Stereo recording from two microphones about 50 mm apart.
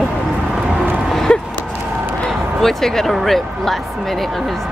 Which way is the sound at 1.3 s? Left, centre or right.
Centre.